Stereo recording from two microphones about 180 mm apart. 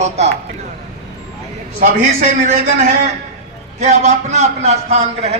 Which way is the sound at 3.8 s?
40° right (ahead or behind).